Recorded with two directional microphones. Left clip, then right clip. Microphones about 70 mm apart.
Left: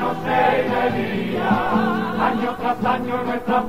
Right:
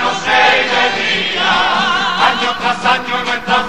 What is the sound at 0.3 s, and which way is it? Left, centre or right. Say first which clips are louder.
Choir: right 7 dB; right.